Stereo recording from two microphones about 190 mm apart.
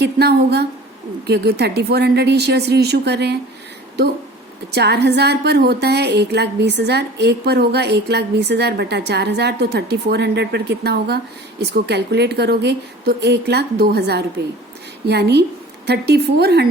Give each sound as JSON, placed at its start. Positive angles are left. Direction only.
{"t": 0.0, "sound": "a woman's voice", "side_deg": -60}
{"t": 4.7, "sound": "a woman's voice", "side_deg": -60}